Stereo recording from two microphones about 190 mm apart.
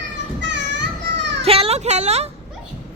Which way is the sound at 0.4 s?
70° right (ahead or behind).